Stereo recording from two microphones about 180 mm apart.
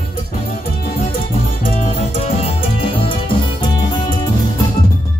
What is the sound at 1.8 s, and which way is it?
Music, 35° left (ahead or behind).